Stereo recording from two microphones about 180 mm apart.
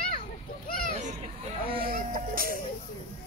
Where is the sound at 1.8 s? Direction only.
55° right (ahead or behind).